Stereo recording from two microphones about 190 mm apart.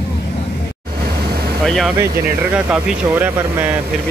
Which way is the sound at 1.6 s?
Centre (ahead or behind).